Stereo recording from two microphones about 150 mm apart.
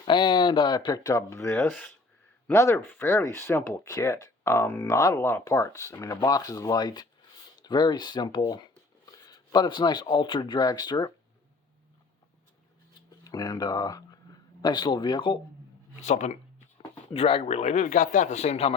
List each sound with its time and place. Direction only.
0.0 s speech: 30° left (ahead or behind)
13.2 s speech: 25° left (ahead or behind)
16.0 s speech: 50° left (ahead or behind)
17.2 s speech: 40° left (ahead or behind)